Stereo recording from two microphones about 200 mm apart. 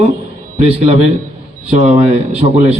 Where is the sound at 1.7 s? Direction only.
35° right (ahead or behind).